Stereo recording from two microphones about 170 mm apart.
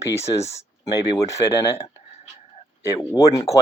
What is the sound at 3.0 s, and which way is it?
Speech, 20° left (ahead or behind).